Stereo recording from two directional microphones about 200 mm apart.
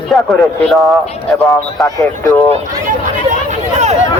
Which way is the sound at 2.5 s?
30° right (ahead or behind).